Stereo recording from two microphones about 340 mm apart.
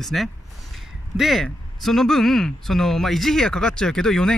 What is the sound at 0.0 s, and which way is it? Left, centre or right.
Speech, centre.